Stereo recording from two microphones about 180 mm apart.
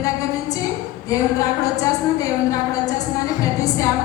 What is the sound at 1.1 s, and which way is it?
A woman's voice, 20° left (ahead or behind).